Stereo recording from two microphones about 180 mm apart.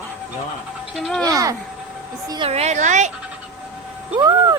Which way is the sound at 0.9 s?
Centre (ahead or behind).